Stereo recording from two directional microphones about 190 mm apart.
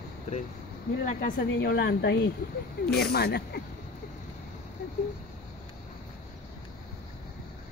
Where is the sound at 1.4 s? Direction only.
65° left (ahead or behind).